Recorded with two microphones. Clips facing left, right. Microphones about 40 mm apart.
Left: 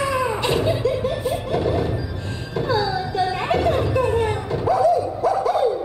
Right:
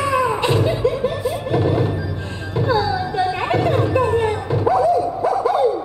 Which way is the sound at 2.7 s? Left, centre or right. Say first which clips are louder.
Right 3 dB; centre.